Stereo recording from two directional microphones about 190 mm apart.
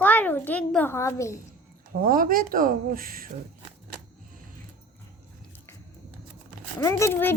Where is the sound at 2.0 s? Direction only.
45° right (ahead or behind).